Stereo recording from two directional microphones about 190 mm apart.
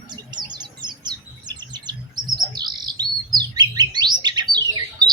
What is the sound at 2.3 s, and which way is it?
Bird, 20° right (ahead or behind).